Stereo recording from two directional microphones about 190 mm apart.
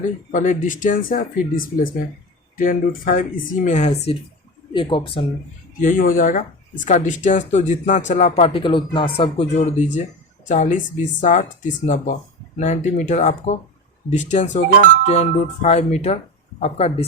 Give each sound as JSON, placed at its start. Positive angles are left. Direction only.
{"t": 0.3, "sound": "speech", "side_deg": 40}
{"t": 5.8, "sound": "speech", "side_deg": 45}
{"t": 12.5, "sound": "speech", "side_deg": 40}